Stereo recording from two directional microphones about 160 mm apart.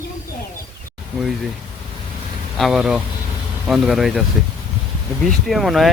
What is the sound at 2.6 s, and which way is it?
Speech, centre (ahead or behind).